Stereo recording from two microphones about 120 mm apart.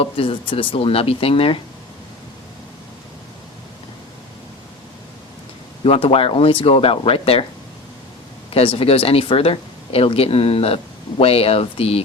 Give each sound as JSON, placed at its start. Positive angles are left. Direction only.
{"t": 0.0, "sound": "speech", "side_deg": 50}
{"t": 5.8, "sound": "speech", "side_deg": 50}
{"t": 8.5, "sound": "speech", "side_deg": 55}